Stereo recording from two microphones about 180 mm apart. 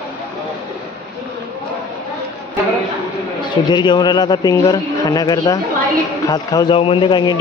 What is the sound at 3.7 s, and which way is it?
A man's voice, 25° left (ahead or behind).